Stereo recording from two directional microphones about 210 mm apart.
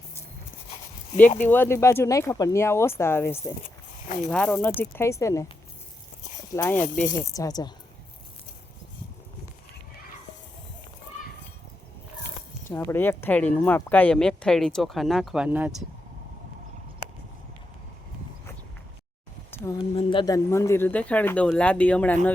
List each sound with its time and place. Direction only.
1.4 s speech: 10° left (ahead or behind)
6.5 s speech: 15° left (ahead or behind)
12.6 s speech: 10° left (ahead or behind); by 15.7 s 5° right (ahead or behind)
19.5 s a sound: 15° left (ahead or behind)
20.0 s speech: 25° left (ahead or behind); by 22.3 s 5° left (ahead or behind)